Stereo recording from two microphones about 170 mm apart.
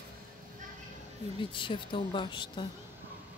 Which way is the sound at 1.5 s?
30° left (ahead or behind).